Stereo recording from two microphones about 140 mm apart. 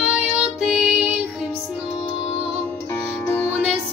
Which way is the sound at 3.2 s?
15° left (ahead or behind).